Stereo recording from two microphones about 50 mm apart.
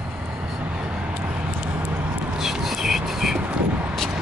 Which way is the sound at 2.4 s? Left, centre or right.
Centre.